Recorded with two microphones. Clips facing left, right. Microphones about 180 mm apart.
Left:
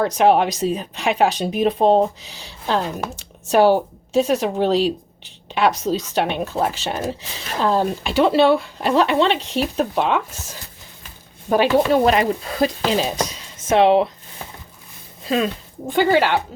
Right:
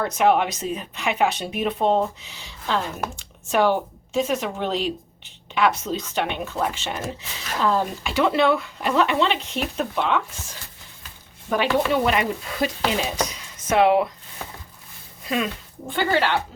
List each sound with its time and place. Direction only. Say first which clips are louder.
0.0 s speech: left 4 dB; 35° left (ahead or behind)
11.4 s speech: left 5 dB; 40° left (ahead or behind)
15.2 s a sound: left 5 dB; 30° left (ahead or behind)
15.9 s speech: left 6 dB; 45° left (ahead or behind)